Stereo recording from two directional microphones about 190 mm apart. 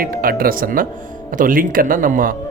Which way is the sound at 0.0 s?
50° right (ahead or behind).